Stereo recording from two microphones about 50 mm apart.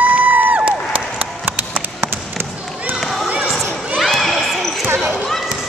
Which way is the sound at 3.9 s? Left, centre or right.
Centre.